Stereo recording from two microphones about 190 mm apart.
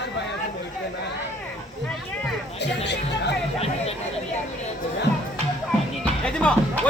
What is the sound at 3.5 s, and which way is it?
Music, 30° left (ahead or behind).